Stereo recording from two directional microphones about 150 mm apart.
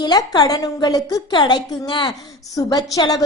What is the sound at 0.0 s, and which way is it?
A woman's voice, 30° left (ahead or behind).